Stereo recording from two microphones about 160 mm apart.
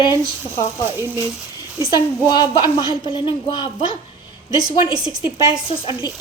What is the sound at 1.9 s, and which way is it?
A woman's voice, 25° left (ahead or behind).